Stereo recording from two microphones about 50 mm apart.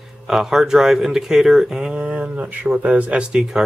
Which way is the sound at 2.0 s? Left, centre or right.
Right.